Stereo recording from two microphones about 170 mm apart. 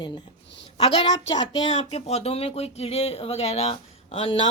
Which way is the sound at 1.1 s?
25° left (ahead or behind).